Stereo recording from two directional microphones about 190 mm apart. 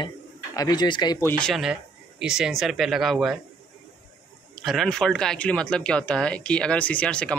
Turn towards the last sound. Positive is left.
turn(degrees=5)  # may be behind; listen again after turning